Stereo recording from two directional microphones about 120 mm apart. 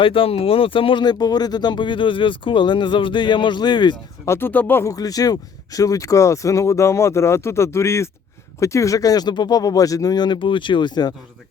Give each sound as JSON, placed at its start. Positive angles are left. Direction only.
{"t": 0.0, "sound": "speech", "side_deg": 50}
{"t": 4.3, "sound": "speech", "side_deg": 20}
{"t": 4.9, "sound": "speech", "side_deg": 30}